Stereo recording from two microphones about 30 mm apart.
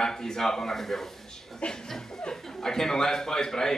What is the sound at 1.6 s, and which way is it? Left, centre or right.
Speech, left.